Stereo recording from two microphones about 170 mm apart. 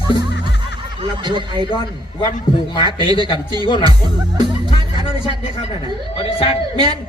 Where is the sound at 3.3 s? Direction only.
25° right (ahead or behind).